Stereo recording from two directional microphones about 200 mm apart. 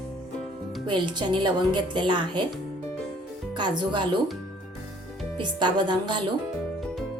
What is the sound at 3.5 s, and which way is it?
Speech, 25° right (ahead or behind).